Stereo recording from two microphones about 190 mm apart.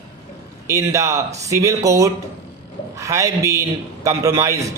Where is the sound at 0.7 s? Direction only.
15° right (ahead or behind).